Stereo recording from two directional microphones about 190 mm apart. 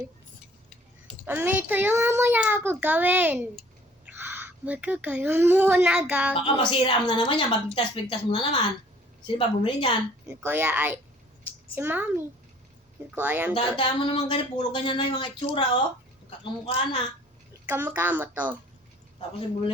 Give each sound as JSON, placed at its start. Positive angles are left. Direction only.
{"t": 1.2, "sound": "a child's voice", "side_deg": -10}
{"t": 6.3, "sound": "a woman's voice", "side_deg": 25}
{"t": 10.2, "sound": "a child's voice", "side_deg": -10}
{"t": 13.5, "sound": "a woman's voice", "side_deg": 30}
{"t": 17.7, "sound": "a child's voice", "side_deg": -10}